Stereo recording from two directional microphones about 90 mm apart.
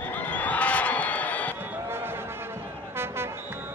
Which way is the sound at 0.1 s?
20° left (ahead or behind).